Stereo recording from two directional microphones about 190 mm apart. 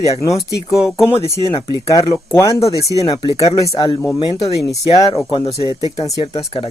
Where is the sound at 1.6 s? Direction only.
25° left (ahead or behind).